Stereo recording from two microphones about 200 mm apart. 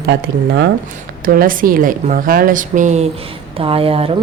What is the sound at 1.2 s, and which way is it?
Speech, 45° right (ahead or behind).